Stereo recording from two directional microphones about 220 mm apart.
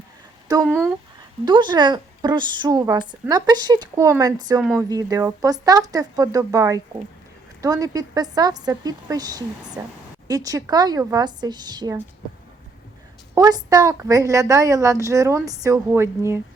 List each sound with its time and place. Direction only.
0.4 s speech: 15° right (ahead or behind)
13.3 s speech: 15° right (ahead or behind)